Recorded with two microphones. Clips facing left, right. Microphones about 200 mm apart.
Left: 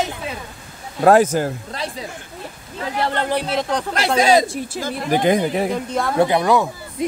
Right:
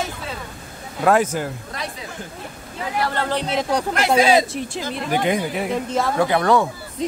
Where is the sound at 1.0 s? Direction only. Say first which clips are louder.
Left 4 dB; 40° left (ahead or behind).